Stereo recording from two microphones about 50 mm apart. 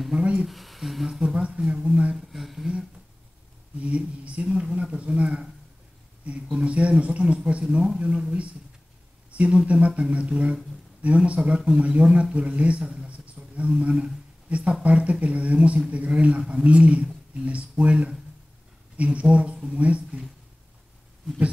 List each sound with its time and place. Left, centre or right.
0.2 s speech: right
0.5 s speech: centre
1.2 s speech: right
2.1 s speech: centre
3.8 s speech: right
4.5 s speech: centre
4.7 s speech: right